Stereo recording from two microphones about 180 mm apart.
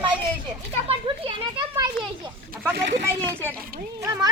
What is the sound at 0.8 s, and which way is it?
Children playing, 30° right (ahead or behind).